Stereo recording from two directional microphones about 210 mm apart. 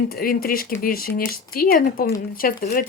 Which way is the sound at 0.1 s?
45° left (ahead or behind).